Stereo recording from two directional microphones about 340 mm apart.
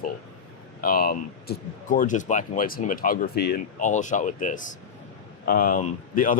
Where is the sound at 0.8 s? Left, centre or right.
Left.